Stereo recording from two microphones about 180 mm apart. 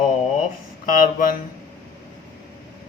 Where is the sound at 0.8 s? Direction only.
50° left (ahead or behind).